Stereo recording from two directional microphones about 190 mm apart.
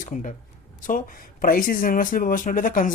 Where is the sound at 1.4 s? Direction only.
50° left (ahead or behind).